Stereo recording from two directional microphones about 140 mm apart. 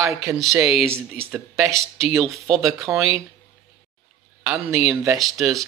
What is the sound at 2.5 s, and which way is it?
Speech, centre (ahead or behind).